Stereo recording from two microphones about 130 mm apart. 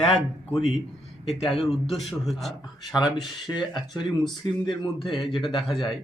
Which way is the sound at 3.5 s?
35° left (ahead or behind).